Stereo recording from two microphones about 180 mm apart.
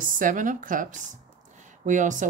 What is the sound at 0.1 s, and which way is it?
Speech, 50° right (ahead or behind).